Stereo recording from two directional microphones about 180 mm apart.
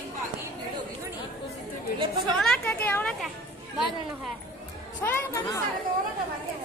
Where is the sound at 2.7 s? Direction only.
15° left (ahead or behind).